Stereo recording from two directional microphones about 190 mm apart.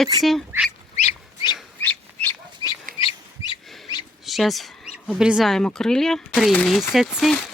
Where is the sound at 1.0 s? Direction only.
25° left (ahead or behind).